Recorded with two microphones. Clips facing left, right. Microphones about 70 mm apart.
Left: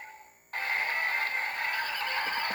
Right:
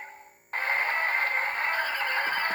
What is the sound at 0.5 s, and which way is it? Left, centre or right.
Neigh, right.